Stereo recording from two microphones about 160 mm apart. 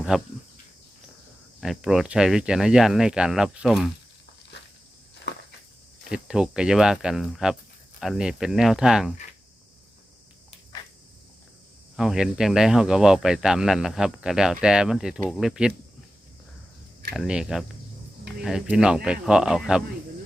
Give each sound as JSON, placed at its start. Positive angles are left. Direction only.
{"t": 0.1, "sound": "speech", "side_deg": -5}
{"t": 1.6, "sound": "speech", "side_deg": -5}
{"t": 6.1, "sound": "speech", "side_deg": -5}
{"t": 10.7, "sound": "a sound", "side_deg": 25}
{"t": 11.9, "sound": "speech", "side_deg": -5}
{"t": 17.2, "sound": "speech", "side_deg": -5}